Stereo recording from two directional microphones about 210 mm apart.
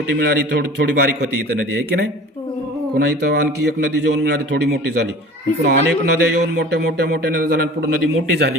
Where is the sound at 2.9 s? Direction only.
50° right (ahead or behind).